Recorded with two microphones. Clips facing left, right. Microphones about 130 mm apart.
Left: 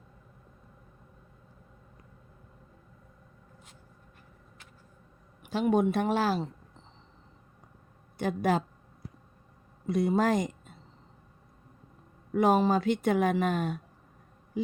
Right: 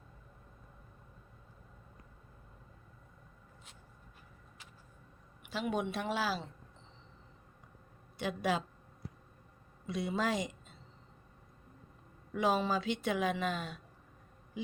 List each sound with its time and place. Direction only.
5.4 s speech: 45° left (ahead or behind)
8.2 s speech: 50° left (ahead or behind)
9.8 s speech: 50° left (ahead or behind)
12.3 s speech: 50° left (ahead or behind)